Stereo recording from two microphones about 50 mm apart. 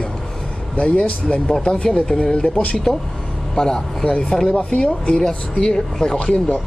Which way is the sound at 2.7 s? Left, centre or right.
Centre.